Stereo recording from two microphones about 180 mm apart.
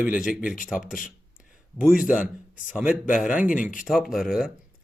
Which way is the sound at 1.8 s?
5° right (ahead or behind).